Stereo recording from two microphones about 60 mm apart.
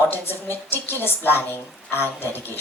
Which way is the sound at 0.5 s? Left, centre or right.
Left.